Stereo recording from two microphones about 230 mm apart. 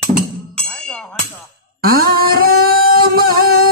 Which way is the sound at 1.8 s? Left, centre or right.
Right.